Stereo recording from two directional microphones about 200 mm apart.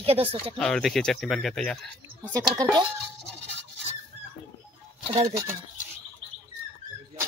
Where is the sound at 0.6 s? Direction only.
5° left (ahead or behind).